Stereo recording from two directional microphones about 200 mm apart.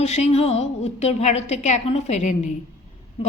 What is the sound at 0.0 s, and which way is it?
A woman's voice, 35° left (ahead or behind).